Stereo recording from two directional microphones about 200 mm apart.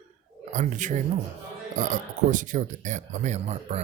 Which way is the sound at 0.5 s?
40° right (ahead or behind).